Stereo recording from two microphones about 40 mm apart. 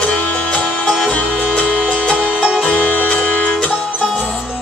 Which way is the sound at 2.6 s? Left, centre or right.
Left.